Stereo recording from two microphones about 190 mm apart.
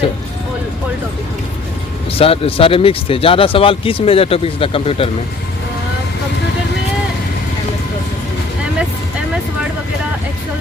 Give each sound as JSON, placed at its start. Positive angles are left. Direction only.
{"t": 2.1, "sound": "speech", "side_deg": 30}